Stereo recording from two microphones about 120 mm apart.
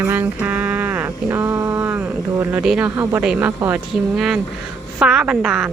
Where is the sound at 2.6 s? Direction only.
5° right (ahead or behind).